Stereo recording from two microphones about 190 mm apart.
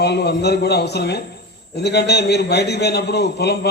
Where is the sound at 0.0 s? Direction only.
60° left (ahead or behind).